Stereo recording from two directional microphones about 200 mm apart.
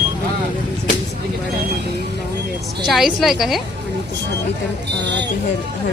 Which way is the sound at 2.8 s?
Centre (ahead or behind).